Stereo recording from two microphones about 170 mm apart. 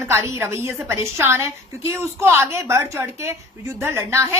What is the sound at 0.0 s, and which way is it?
A woman's voice, 15° right (ahead or behind).